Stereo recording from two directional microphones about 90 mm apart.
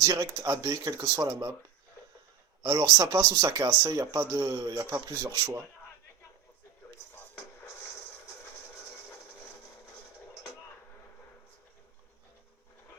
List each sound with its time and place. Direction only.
0.0 s speech: 40° right (ahead or behind)
2.6 s speech: 40° right (ahead or behind)